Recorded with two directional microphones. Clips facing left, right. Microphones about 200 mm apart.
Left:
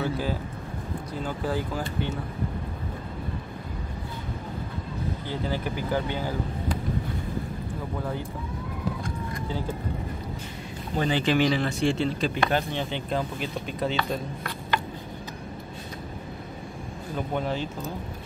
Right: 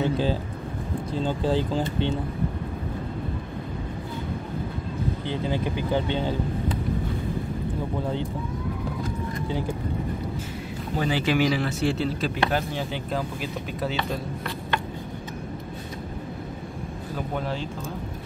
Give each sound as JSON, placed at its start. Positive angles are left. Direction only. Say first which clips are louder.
{"t": 0.0, "sound": "vehicle", "louder": "right 4 dB", "side_deg": -25}
{"t": 1.1, "sound": "speech", "louder": "right 5 dB", "side_deg": -25}
{"t": 5.3, "sound": "speech", "louder": "right 2 dB", "side_deg": -20}
{"t": 9.5, "sound": "speech", "louder": "right 2 dB", "side_deg": -15}
{"t": 11.0, "sound": "speech", "louder": "even", "side_deg": -5}
{"t": 17.3, "sound": "speech", "louder": "left 2 dB", "side_deg": 0}